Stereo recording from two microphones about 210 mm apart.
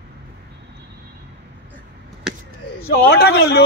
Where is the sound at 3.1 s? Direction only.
50° left (ahead or behind).